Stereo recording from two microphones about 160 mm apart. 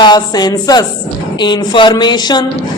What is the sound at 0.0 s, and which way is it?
A woman's voice, 25° left (ahead or behind).